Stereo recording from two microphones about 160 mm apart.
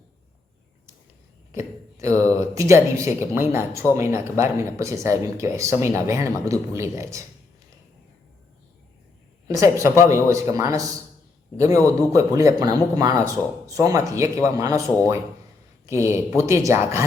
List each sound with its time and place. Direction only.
1.5 s speech: 20° right (ahead or behind)
9.5 s speech: 20° right (ahead or behind)
15.9 s speech: 15° right (ahead or behind)